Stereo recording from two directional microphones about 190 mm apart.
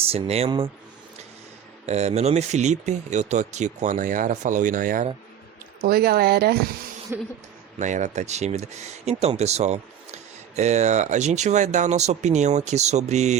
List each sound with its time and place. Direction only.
0.0 s speech: 30° right (ahead or behind)
1.9 s speech: 35° right (ahead or behind)
5.8 s speech: 55° right (ahead or behind)
7.1 s a sound: 10° right (ahead or behind)
7.8 s speech: 40° right (ahead or behind)